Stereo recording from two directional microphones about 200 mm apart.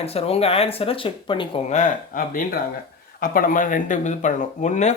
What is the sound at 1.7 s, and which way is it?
Speech, 40° left (ahead or behind).